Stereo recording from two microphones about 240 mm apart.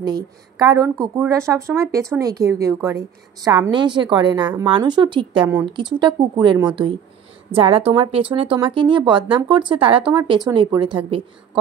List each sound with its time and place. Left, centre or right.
0.0 s a woman's voice: centre
5.4 s a woman's voice: centre
5.7 s speech: centre